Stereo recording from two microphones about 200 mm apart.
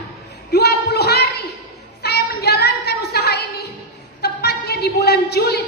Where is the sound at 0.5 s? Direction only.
55° left (ahead or behind).